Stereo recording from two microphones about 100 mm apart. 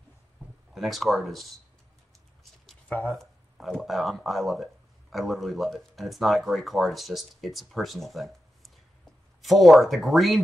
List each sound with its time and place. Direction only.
0.7 s speech: centre (ahead or behind)
3.1 s speech: centre (ahead or behind)